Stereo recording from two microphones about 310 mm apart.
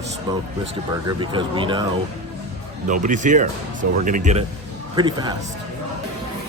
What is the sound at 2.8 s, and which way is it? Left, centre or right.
Speech, right.